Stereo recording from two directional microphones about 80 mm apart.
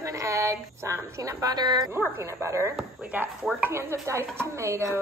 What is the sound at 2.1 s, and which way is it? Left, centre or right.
Speech, right.